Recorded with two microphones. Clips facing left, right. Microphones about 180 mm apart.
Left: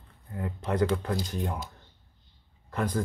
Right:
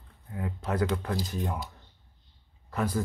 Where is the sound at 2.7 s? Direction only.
5° right (ahead or behind).